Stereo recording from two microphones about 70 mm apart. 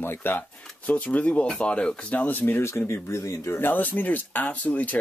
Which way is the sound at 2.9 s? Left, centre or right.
Left.